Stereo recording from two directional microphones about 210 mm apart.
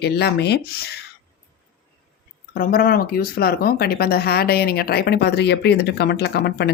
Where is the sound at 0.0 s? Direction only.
50° left (ahead or behind).